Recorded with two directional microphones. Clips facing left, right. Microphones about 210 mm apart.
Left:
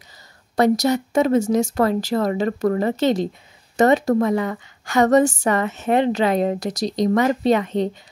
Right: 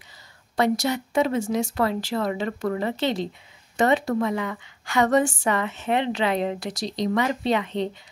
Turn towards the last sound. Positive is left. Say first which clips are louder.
# left 6 dB
turn(degrees=45)  # may be behind; listen again after turning